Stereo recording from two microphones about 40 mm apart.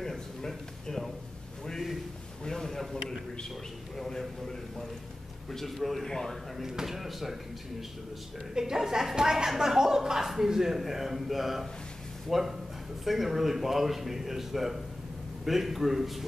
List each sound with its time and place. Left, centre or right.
0.0 s a sound: centre
0.8 s a man's voice: centre
2.4 s a man's voice: centre
6.0 s a man's voice: centre
6.6 s speech: centre
8.5 s a man's voice: centre